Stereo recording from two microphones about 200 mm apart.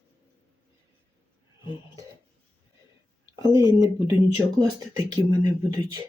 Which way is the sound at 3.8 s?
20° right (ahead or behind).